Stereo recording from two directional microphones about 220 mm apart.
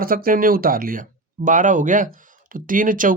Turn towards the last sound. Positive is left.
turn(degrees=-40)  # may be behind; listen again after turning